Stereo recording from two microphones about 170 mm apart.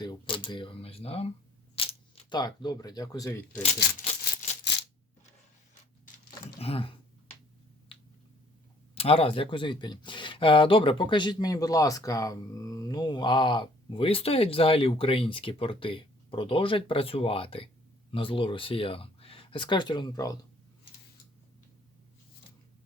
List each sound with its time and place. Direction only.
0.0 s speech: 25° left (ahead or behind)
4.7 s coin: 90° left
6.6 s speech: 35° left (ahead or behind)
7.9 s a sound: 35° left (ahead or behind)
9.0 s speech: 35° left (ahead or behind)